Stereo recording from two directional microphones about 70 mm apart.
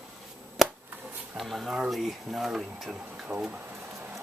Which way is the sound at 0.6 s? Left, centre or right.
Centre.